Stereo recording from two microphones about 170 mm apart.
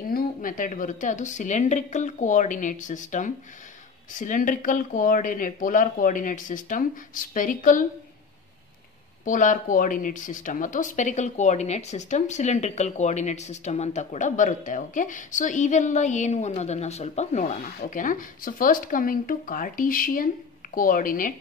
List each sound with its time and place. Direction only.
0.1 s speech: 55° left (ahead or behind)
9.2 s speech: 50° left (ahead or behind)
17.7 s speech: 55° left (ahead or behind)